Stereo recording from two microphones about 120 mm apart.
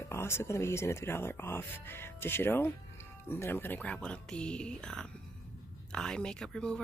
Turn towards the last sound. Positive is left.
turn(degrees=5)  # may be behind; listen again after turning